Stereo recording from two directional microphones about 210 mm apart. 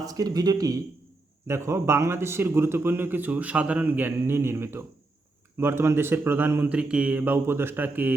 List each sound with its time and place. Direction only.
0.0 s speech: 15° right (ahead or behind)